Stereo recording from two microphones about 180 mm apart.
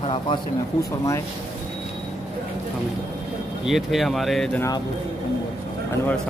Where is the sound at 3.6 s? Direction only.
Centre (ahead or behind).